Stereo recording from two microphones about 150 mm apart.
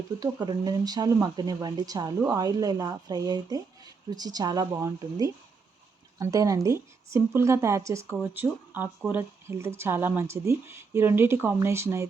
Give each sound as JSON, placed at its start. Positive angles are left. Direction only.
{"t": 0.2, "sound": "speech", "side_deg": -25}